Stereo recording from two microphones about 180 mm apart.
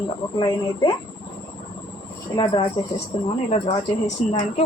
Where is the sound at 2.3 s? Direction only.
25° left (ahead or behind).